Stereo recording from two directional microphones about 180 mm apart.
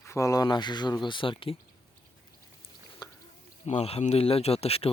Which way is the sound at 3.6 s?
35° left (ahead or behind).